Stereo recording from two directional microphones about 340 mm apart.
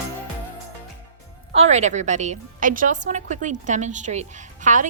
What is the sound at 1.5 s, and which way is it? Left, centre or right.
A woman's voice, centre.